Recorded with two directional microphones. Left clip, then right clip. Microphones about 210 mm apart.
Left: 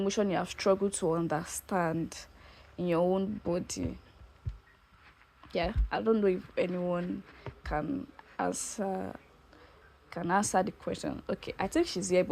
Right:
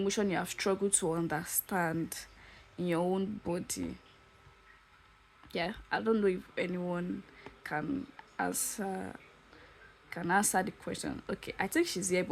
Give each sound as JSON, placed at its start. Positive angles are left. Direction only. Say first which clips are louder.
{"t": 0.0, "sound": "a woman's voice", "louder": "left 2 dB", "side_deg": -10}
{"t": 5.5, "sound": "a woman's voice", "louder": "left 2 dB", "side_deg": -5}